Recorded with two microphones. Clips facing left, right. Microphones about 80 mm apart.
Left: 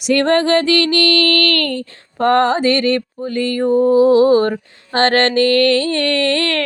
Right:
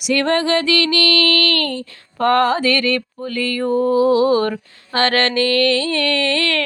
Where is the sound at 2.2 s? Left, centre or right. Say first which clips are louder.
Left 2 dB; left.